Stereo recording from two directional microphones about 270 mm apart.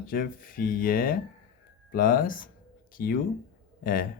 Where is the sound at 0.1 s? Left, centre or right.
Left.